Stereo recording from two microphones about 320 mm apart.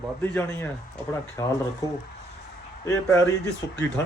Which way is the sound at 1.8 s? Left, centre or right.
Centre.